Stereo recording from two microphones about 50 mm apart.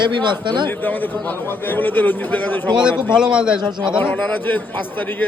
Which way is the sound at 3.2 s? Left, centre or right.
Centre.